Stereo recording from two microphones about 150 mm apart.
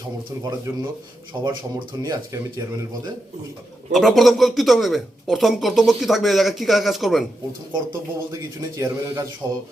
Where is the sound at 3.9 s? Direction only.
Centre (ahead or behind).